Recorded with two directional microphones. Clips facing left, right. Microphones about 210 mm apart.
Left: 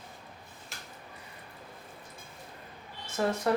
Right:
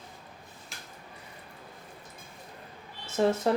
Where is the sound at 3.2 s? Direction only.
25° right (ahead or behind).